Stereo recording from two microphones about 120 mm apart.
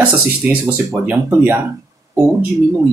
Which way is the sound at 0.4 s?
15° right (ahead or behind).